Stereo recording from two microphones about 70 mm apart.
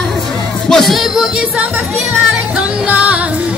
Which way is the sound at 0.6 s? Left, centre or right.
Centre.